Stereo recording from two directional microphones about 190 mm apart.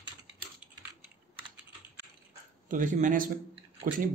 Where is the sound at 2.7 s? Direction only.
45° right (ahead or behind).